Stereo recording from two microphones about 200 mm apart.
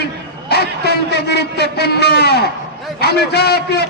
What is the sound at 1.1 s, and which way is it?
A man's voice, 55° left (ahead or behind).